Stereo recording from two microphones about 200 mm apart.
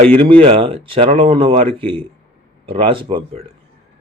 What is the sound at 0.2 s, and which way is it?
Speech, 30° right (ahead or behind).